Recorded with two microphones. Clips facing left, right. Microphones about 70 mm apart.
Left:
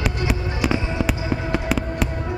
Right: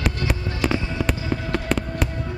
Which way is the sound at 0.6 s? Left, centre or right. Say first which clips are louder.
Left 1 dB; centre.